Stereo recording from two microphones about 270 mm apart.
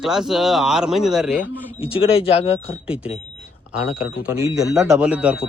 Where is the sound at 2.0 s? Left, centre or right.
Left.